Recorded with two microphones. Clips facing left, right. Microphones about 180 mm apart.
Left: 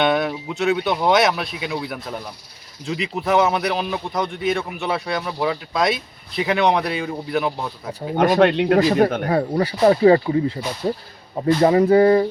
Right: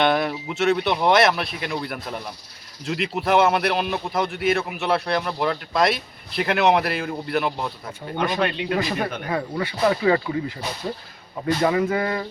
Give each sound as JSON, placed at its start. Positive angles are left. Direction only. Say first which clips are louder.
{"t": 0.0, "sound": "speech", "louder": "left 1 dB", "side_deg": 0}
{"t": 8.1, "sound": "speech", "louder": "left 7 dB", "side_deg": 45}
{"t": 8.4, "sound": "speech", "louder": "left 8 dB", "side_deg": 60}
{"t": 11.6, "sound": "speech", "louder": "left 9 dB", "side_deg": 35}